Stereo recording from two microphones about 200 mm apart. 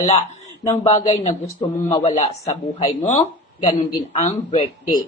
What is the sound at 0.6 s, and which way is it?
Speech, 30° left (ahead or behind).